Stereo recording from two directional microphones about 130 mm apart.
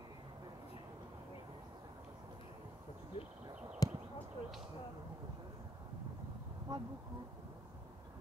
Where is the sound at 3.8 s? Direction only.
30° left (ahead or behind).